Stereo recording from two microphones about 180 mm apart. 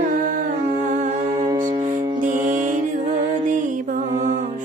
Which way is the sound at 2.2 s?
45° right (ahead or behind).